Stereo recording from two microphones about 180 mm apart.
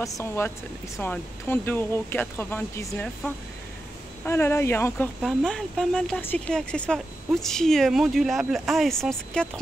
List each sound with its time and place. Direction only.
0.0 s speech: 15° left (ahead or behind)
4.2 s speech: 15° left (ahead or behind)